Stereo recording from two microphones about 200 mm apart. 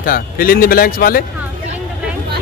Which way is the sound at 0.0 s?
45° left (ahead or behind).